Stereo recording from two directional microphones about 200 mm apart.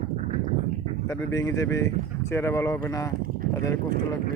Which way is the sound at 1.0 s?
15° left (ahead or behind).